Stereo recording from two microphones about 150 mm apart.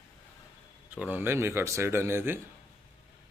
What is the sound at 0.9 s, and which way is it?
A man's voice, 10° right (ahead or behind).